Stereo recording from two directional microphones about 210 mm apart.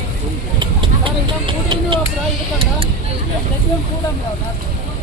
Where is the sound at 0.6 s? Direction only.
25° right (ahead or behind).